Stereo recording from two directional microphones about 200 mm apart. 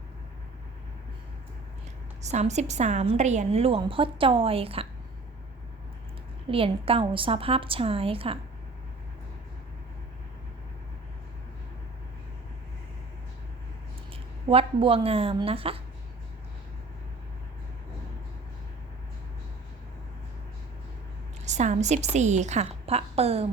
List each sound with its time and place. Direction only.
2.2 s a woman's voice: 35° right (ahead or behind)
6.5 s a woman's voice: 25° right (ahead or behind)
14.1 s speech: 30° right (ahead or behind)
21.4 s a woman's voice: 35° right (ahead or behind)